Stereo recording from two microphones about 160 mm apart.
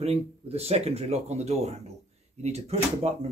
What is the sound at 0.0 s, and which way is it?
A man's voice, 40° right (ahead or behind).